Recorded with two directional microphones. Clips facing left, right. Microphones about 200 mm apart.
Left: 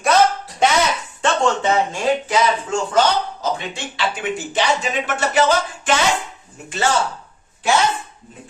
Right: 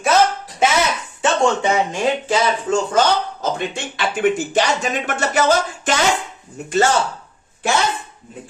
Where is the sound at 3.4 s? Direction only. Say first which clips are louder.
Right 2 dB; 50° right (ahead or behind).